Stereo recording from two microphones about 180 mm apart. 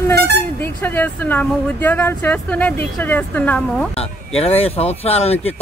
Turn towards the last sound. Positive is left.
turn(degrees=35)  # may be behind; listen again after turning